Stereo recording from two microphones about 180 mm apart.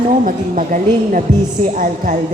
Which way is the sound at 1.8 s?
45° right (ahead or behind).